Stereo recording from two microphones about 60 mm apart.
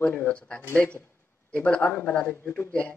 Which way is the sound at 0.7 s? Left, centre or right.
Left.